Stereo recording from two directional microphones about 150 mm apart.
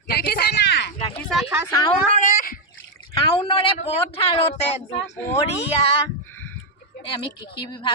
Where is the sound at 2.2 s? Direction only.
65° left (ahead or behind).